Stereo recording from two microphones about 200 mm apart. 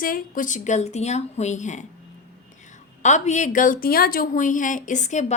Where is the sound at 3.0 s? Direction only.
35° left (ahead or behind).